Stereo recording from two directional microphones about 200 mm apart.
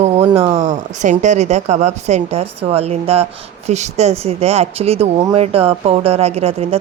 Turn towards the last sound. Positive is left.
turn(degrees=-30)  # may be behind; listen again after turning